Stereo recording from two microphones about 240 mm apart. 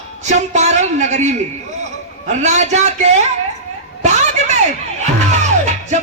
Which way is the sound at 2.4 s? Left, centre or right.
Right.